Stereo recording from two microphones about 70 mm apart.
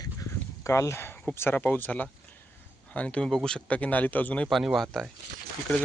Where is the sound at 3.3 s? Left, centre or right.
Centre.